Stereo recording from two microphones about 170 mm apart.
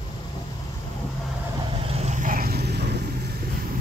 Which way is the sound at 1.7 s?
35° right (ahead or behind).